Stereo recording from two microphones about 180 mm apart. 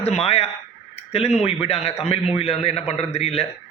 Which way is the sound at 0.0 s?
35° left (ahead or behind).